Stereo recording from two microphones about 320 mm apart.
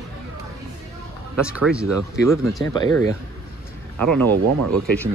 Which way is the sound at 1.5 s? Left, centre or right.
Centre.